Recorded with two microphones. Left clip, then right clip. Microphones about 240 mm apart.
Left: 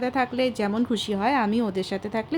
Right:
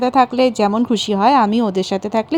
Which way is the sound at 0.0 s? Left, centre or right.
Right.